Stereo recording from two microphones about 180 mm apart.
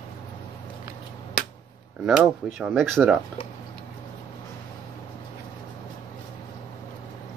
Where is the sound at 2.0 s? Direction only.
5° right (ahead or behind).